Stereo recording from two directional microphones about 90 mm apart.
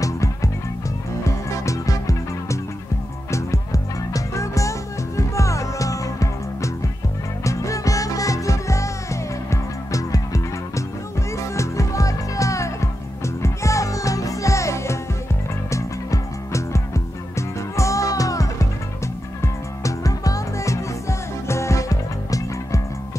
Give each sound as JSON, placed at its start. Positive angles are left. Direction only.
{"t": 0.0, "sound": "music", "side_deg": 35}